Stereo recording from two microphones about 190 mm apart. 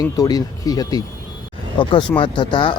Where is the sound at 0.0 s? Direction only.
20° left (ahead or behind).